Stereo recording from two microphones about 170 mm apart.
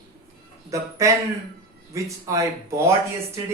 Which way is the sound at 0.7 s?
20° right (ahead or behind).